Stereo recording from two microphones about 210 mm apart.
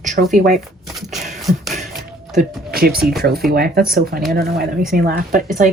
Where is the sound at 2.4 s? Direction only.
45° right (ahead or behind).